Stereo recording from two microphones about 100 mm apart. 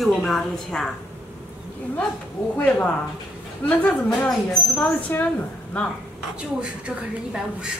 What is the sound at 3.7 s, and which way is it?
Speech, 15° left (ahead or behind).